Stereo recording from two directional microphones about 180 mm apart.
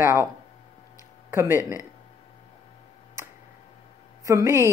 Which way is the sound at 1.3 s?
15° right (ahead or behind).